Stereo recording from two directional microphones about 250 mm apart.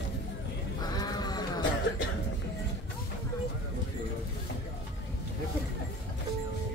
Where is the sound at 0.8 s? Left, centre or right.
Centre.